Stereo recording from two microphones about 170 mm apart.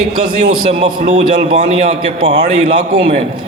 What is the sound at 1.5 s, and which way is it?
Speech, 35° right (ahead or behind).